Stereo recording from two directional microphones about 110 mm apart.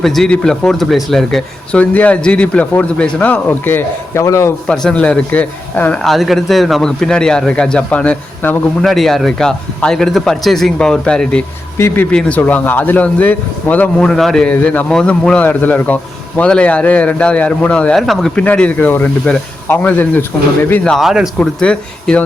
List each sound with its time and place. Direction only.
0.0 s a man's voice: 5° left (ahead or behind)
1.8 s a man's voice: 15° left (ahead or behind)
4.7 s a man's voice: 5° left (ahead or behind)
6.0 s a man's voice: centre (ahead or behind)
8.8 s a man's voice: centre (ahead or behind)
11.8 s speech: 25° left (ahead or behind)
12.1 s a man's voice: 15° left (ahead or behind)
20.9 s a man's voice: 5° right (ahead or behind)
21.3 s a man's voice: 10° left (ahead or behind)